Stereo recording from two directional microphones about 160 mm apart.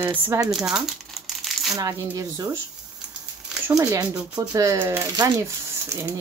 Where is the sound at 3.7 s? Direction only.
20° right (ahead or behind).